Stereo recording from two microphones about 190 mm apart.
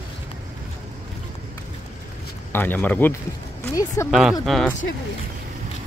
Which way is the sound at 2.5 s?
10° left (ahead or behind).